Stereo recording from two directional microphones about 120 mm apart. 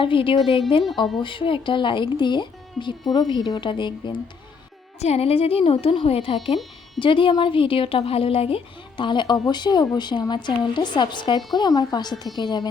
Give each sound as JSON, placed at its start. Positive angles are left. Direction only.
{"t": 0.0, "sound": "a woman's voice", "side_deg": 45}
{"t": 4.9, "sound": "a woman's voice", "side_deg": 60}